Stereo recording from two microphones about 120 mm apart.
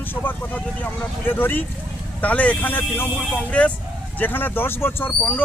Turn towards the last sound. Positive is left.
turn(degrees=15)  # may be behind; listen again after turning